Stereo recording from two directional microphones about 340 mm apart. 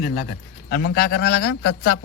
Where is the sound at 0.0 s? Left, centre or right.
Left.